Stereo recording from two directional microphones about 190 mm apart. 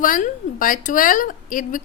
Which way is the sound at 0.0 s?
45° left (ahead or behind).